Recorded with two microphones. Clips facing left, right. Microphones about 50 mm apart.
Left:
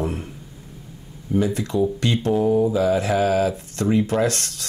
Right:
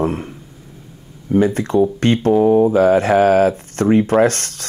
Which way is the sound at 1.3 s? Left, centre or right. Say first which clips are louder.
Right 6 dB; right.